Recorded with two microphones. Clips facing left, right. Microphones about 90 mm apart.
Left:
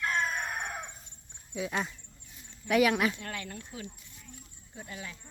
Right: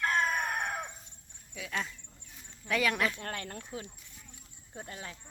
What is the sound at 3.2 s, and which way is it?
Speech, 40° right (ahead or behind).